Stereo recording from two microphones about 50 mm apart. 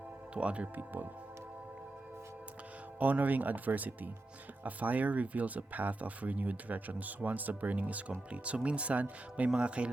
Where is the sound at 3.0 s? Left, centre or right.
Right.